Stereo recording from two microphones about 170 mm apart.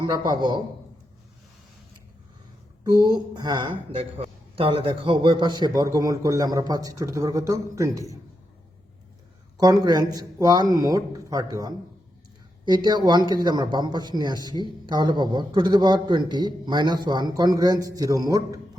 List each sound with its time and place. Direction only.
0.0 s speech: 25° right (ahead or behind)
3.1 s speech: 25° right (ahead or behind)
9.6 s speech: 25° right (ahead or behind)